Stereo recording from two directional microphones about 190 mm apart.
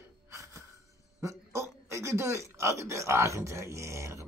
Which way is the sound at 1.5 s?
15° right (ahead or behind).